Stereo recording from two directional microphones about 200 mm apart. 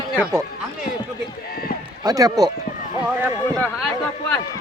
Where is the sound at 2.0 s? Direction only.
20° right (ahead or behind).